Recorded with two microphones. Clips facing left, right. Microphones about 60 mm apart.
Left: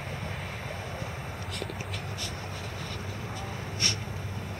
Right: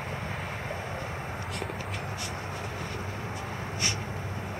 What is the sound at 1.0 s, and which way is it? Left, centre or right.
Vehicle, centre.